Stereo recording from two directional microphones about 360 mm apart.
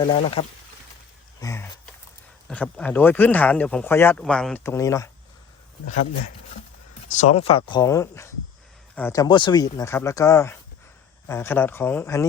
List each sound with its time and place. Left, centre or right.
0.0 s speech: centre
1.4 s a sound: centre
2.5 s speech: centre
7.1 s speech: centre